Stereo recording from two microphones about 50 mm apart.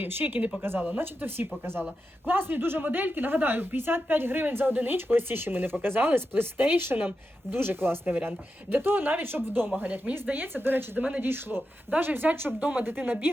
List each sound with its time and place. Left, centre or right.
0.0 s a woman's voice: right
11.2 s a woman's voice: right